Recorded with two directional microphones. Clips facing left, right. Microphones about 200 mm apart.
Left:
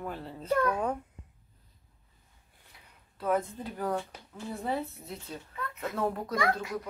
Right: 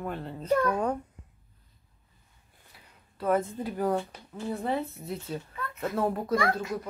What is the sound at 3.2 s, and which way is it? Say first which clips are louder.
Speech: right 3 dB; centre (ahead or behind).